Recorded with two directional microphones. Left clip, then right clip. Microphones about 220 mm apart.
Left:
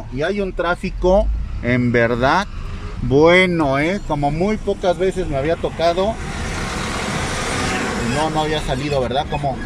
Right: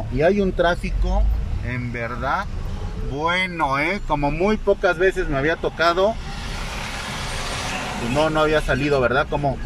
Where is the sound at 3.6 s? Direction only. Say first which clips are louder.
Left 3 dB; 15° left (ahead or behind); by 6.1 s centre (ahead or behind).